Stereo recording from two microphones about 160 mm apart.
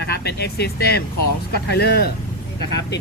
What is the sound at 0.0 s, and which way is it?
Speech, 90° left.